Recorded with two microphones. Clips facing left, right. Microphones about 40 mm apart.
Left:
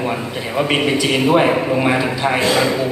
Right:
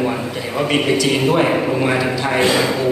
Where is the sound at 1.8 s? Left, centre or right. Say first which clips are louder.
Left 1 dB; centre.